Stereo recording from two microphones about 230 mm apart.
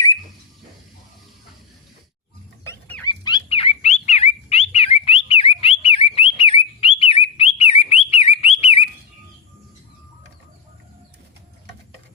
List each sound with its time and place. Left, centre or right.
2.6 s dog: centre; by 8.9 s left